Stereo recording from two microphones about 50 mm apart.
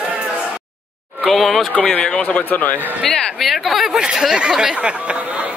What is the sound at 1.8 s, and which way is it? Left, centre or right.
Speech, centre.